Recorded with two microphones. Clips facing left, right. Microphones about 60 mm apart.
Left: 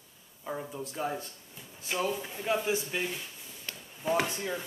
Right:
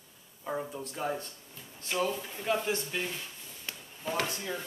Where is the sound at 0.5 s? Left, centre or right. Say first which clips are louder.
Right 1 dB; centre.